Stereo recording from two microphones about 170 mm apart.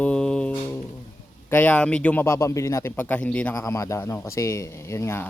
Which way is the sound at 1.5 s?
10° left (ahead or behind).